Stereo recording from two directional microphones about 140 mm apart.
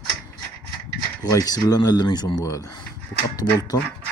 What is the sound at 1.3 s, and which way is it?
Speech, 25° left (ahead or behind).